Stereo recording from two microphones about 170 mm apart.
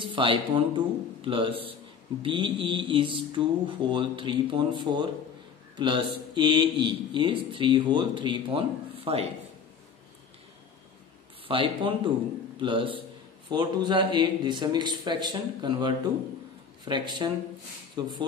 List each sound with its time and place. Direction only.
0.0 s a man's voice: 30° right (ahead or behind)
11.4 s speech: 30° right (ahead or behind)